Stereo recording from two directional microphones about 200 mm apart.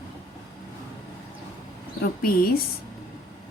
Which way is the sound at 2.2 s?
50° left (ahead or behind).